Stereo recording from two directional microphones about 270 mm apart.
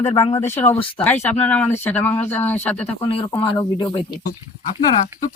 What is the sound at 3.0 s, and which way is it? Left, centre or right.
Speech, centre.